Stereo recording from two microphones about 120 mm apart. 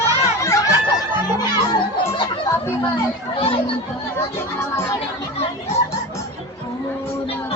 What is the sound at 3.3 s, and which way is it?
Chatter, 50° left (ahead or behind).